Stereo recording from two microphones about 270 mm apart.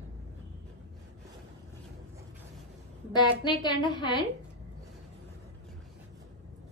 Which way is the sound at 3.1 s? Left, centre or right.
Centre.